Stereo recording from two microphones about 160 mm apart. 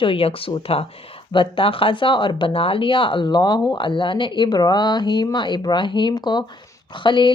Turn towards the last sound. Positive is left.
turn(degrees=30)  # may be behind; listen again after turning